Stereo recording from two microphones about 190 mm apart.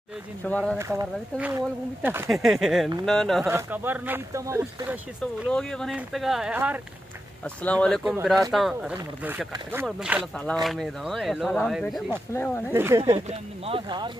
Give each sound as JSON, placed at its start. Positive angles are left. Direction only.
{"t": 0.4, "sound": "speech", "side_deg": 5}
{"t": 0.7, "sound": "speech", "side_deg": -15}
{"t": 3.4, "sound": "speech", "side_deg": -10}
{"t": 5.5, "sound": "speech", "side_deg": 5}
{"t": 7.4, "sound": "speech", "side_deg": 5}
{"t": 12.3, "sound": "speech", "side_deg": 10}
{"t": 12.7, "sound": "speech", "side_deg": -15}
{"t": 13.0, "sound": "speech", "side_deg": -30}